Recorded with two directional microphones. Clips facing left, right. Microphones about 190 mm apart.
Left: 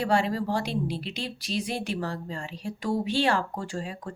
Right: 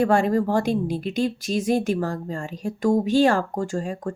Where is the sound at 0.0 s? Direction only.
50° right (ahead or behind).